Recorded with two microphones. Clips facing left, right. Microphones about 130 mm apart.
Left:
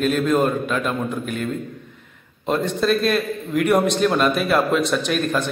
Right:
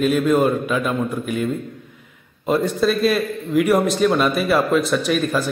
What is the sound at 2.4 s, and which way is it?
A man's voice, 5° right (ahead or behind).